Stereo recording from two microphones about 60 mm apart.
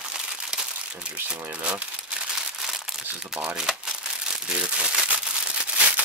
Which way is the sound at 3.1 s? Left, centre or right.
Centre.